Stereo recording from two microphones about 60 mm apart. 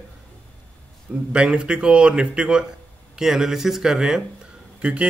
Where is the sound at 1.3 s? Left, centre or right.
Centre.